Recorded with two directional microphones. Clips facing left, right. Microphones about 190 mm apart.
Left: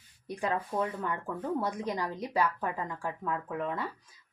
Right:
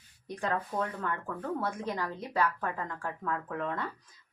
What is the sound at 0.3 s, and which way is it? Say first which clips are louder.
Speech: left 1 dB; 10° left (ahead or behind).